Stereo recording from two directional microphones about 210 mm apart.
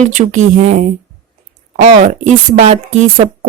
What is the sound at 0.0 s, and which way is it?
Speech, 35° right (ahead or behind).